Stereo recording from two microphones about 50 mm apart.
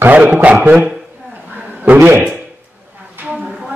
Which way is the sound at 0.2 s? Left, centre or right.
Right.